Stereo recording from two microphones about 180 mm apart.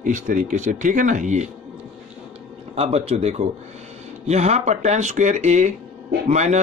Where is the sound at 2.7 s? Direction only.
35° right (ahead or behind).